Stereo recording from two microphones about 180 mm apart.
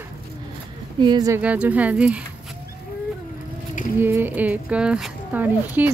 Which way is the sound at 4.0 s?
10° right (ahead or behind).